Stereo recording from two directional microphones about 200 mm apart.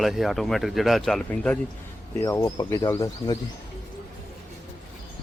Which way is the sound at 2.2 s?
15° left (ahead or behind).